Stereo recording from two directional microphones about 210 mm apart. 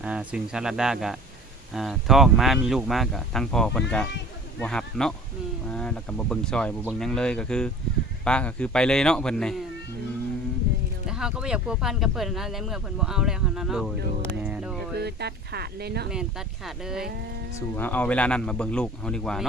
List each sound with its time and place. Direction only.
0.0 s speech: 5° right (ahead or behind)
11.1 s speech: 5° right (ahead or behind)
14.4 s music: 5° right (ahead or behind)
15.0 s speech: 50° right (ahead or behind)
16.6 s speech: centre (ahead or behind)
17.7 s speech: 10° left (ahead or behind)